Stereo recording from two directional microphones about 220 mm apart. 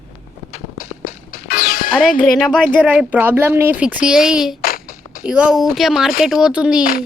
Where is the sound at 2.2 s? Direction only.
Centre (ahead or behind).